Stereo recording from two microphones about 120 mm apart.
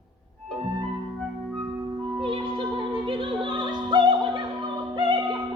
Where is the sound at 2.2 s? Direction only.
45° right (ahead or behind).